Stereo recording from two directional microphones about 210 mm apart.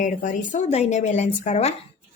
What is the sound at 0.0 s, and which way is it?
A woman's voice, 35° left (ahead or behind).